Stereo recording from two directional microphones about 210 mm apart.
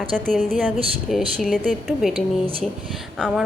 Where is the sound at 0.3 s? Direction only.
5° left (ahead or behind).